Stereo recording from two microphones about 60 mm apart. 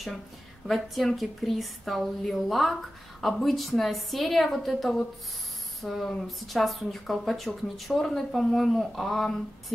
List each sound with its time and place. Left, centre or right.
0.7 s a woman's voice: centre